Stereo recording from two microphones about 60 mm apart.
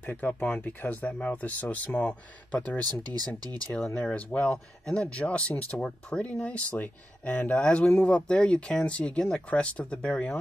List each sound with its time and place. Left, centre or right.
0.0 s speech: left
2.8 s speech: right
3.7 s speech: centre